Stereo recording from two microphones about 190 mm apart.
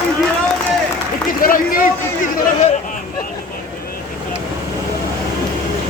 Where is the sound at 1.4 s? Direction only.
45° left (ahead or behind).